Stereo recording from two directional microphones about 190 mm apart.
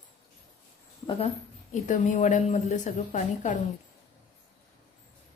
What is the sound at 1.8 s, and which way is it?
A woman's voice, 40° left (ahead or behind).